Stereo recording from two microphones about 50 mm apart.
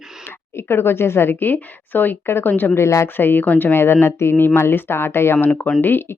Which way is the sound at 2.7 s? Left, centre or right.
Left.